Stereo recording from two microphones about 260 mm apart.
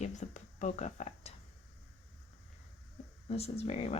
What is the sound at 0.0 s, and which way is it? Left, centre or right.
Speech, left.